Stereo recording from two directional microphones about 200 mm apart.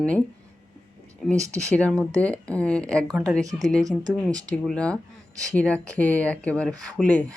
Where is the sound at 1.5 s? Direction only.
5° left (ahead or behind).